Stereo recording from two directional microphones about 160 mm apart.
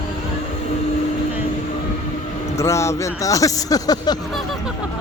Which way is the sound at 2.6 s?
15° left (ahead or behind).